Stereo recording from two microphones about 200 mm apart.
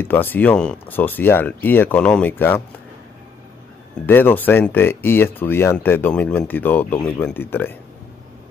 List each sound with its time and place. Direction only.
0.0 s speech: 10° left (ahead or behind)
4.0 s speech: 10° left (ahead or behind)